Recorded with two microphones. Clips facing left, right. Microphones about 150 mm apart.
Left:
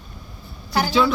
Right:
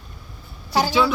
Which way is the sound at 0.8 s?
5° right (ahead or behind).